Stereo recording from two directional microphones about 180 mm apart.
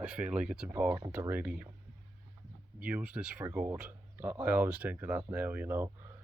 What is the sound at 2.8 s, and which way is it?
Speech, 5° right (ahead or behind).